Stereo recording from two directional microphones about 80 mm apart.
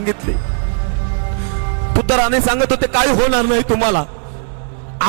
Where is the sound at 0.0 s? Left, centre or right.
Centre.